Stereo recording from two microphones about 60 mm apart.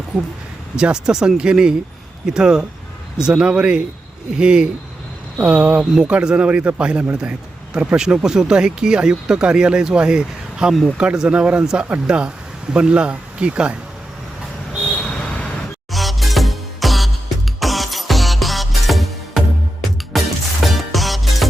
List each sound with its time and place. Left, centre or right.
0.1 s speech: centre
14.9 s a sound: centre
15.9 s music: centre